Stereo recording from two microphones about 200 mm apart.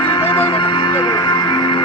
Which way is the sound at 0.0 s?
25° left (ahead or behind).